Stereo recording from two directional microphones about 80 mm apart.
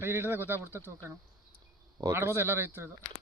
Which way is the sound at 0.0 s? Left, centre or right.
Right.